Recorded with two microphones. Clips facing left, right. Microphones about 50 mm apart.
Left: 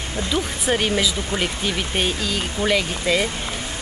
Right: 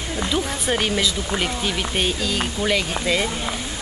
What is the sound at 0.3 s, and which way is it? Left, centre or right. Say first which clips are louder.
Speech: left 2 dB; centre.